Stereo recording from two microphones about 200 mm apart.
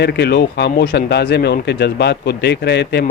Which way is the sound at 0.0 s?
55° left (ahead or behind).